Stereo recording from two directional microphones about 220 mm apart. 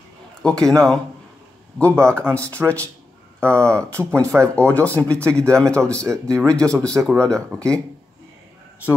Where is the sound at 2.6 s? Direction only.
5° right (ahead or behind).